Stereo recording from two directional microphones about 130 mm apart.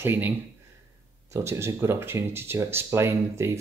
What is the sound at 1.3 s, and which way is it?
Speech, 20° right (ahead or behind).